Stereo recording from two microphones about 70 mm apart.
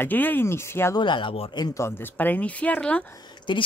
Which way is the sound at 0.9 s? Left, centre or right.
Left.